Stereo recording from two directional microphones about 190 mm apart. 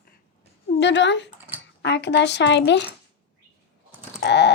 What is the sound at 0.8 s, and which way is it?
Speech, 70° left (ahead or behind).